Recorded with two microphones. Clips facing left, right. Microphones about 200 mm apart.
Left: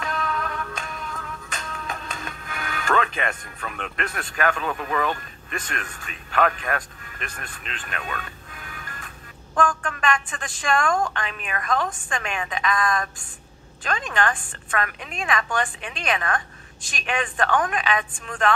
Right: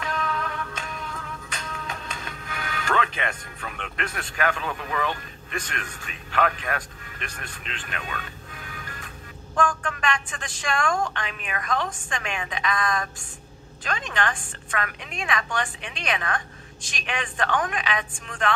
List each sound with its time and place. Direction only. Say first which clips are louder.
0.0 s music: left 1 dB; 45° left (ahead or behind)
3.7 s a woman's voice: left 2 dB; 45° left (ahead or behind)
9.6 s a woman's voice: left 1 dB; 45° left (ahead or behind)